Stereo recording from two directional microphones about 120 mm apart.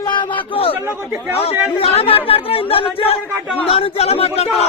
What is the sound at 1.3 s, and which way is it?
Speech, 55° left (ahead or behind).